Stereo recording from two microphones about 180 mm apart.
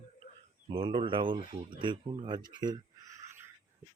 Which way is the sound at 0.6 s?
30° right (ahead or behind).